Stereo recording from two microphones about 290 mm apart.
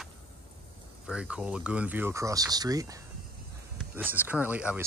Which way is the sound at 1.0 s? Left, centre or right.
Centre.